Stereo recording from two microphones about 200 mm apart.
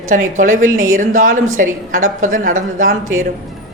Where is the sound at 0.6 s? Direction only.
90° right.